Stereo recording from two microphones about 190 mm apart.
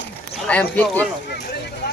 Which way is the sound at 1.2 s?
65° left (ahead or behind).